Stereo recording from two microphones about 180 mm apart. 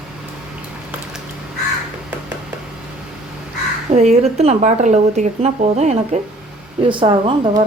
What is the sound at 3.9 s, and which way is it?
Speech, 35° right (ahead or behind).